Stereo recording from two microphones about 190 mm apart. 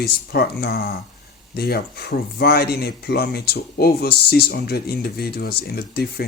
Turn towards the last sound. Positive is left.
turn(degrees=55)  # may be behind; listen again after turning